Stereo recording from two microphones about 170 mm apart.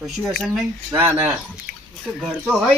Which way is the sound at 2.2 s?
Centre (ahead or behind).